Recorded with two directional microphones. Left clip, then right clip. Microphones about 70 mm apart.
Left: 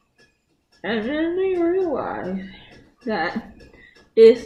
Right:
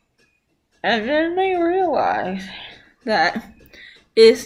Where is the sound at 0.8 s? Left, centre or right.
Right.